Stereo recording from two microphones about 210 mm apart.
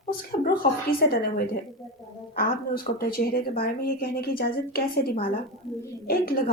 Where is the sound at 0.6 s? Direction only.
40° left (ahead or behind).